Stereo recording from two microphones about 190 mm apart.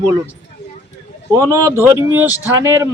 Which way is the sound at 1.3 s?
15° right (ahead or behind).